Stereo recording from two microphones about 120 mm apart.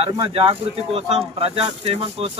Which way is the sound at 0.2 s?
50° right (ahead or behind).